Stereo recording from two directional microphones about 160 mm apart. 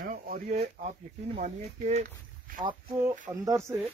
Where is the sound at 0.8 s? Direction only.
45° right (ahead or behind).